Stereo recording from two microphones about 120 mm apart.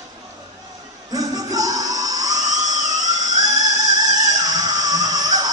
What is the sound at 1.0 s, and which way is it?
Music, 30° right (ahead or behind).